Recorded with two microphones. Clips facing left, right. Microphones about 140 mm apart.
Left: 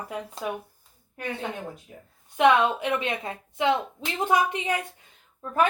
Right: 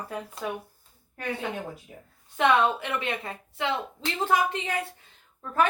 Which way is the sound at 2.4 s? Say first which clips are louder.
Left 2 dB; 20° left (ahead or behind).